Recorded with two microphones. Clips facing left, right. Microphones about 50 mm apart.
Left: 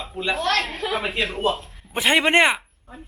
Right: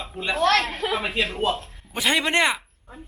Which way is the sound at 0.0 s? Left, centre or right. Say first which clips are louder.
Right 2 dB; centre.